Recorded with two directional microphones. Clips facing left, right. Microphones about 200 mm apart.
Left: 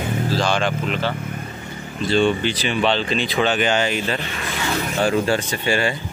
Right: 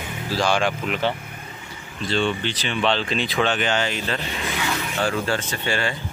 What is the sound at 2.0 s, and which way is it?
Speech, 10° left (ahead or behind).